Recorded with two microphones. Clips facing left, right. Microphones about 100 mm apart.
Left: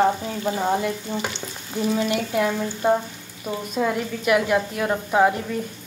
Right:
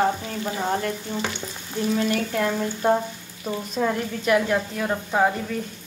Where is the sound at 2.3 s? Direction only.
10° left (ahead or behind).